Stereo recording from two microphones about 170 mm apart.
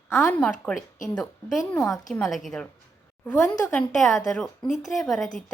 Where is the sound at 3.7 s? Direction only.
5° left (ahead or behind).